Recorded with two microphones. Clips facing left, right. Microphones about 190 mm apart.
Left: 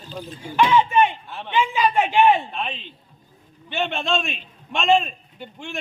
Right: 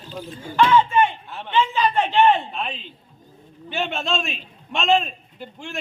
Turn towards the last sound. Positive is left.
turn(degrees=0)  # may be behind; listen again after turning